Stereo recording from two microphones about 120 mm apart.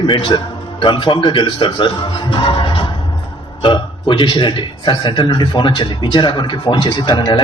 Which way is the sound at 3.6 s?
40° left (ahead or behind).